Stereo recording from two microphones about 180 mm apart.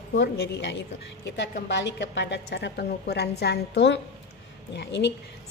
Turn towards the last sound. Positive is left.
turn(degrees=80)